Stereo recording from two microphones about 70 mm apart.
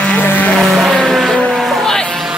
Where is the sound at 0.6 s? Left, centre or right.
Centre.